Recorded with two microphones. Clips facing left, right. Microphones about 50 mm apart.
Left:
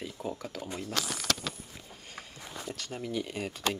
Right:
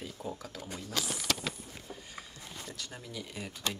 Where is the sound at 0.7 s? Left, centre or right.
Left.